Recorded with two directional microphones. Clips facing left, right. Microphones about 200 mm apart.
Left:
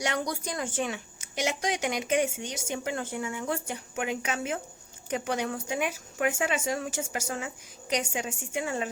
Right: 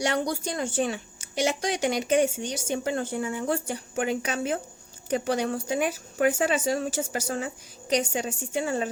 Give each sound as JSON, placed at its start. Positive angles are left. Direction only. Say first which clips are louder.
{"t": 0.0, "sound": "speech", "louder": "right 4 dB", "side_deg": -30}